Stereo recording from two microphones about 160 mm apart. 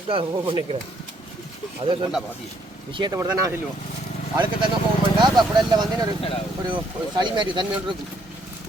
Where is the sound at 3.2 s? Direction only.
20° right (ahead or behind).